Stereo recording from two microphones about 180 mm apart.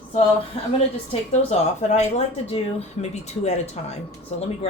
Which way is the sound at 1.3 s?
35° left (ahead or behind).